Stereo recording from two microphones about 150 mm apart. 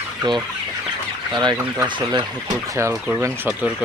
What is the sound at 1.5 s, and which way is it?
Speech, 15° right (ahead or behind).